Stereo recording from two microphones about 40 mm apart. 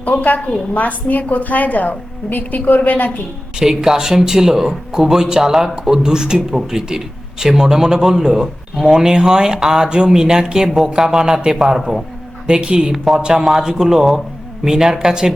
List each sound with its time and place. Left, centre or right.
0.1 s a woman's voice: left
3.6 s speech: centre
12.5 s a woman's voice: right